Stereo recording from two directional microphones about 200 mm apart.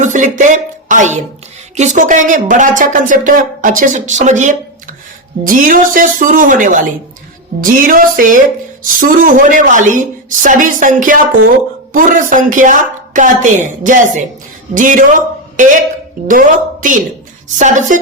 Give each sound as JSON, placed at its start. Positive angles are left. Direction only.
{"t": 0.0, "sound": "speech", "side_deg": -40}
{"t": 7.6, "sound": "a sound", "side_deg": -45}
{"t": 8.8, "sound": "speech", "side_deg": -40}